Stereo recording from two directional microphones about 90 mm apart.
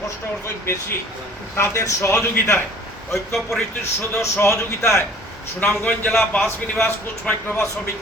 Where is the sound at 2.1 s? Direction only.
20° left (ahead or behind).